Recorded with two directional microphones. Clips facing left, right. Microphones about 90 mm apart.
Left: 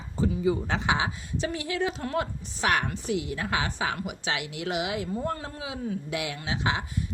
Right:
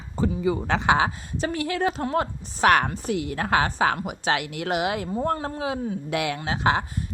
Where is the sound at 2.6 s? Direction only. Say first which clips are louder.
Right 7 dB; 65° right (ahead or behind).